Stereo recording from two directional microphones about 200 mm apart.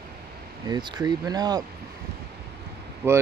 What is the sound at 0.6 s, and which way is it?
Speech, 20° right (ahead or behind).